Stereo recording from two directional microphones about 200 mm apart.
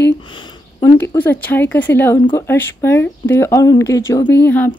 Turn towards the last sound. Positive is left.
turn(degrees=10)  # may be behind; listen again after turning